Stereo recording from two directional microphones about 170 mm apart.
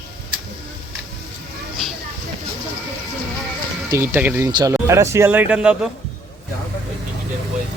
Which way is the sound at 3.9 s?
15° right (ahead or behind).